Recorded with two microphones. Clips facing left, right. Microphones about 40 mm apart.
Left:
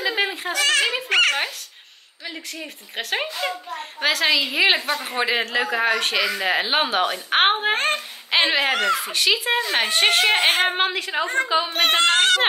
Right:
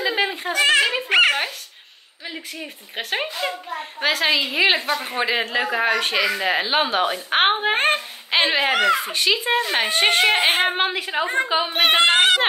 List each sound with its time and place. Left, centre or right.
0.1 s a sound: centre
0.5 s speech: centre
2.6 s a woman's voice: centre
7.7 s speech: right
8.3 s a woman's voice: centre
8.7 s a woman's voice: centre